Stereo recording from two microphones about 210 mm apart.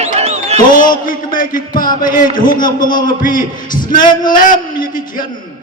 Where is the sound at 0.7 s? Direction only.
40° left (ahead or behind).